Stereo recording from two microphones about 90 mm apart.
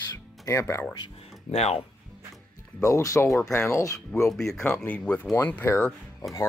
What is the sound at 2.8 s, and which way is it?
Speech, 35° left (ahead or behind).